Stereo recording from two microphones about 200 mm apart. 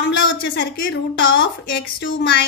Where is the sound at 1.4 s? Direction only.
70° left (ahead or behind).